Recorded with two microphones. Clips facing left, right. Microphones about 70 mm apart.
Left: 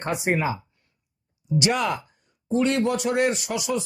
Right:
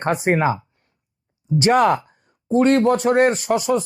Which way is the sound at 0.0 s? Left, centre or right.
Right.